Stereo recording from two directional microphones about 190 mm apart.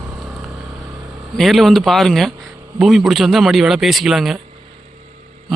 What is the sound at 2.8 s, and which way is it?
A man's voice, centre (ahead or behind).